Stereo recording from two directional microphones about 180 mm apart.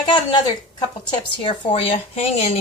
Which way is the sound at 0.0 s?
25° left (ahead or behind).